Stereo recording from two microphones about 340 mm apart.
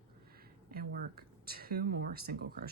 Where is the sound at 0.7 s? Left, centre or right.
Right.